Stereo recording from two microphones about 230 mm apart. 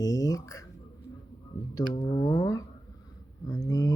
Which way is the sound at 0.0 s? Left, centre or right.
Centre.